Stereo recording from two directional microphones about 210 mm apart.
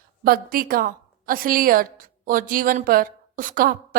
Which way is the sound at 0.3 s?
45° right (ahead or behind).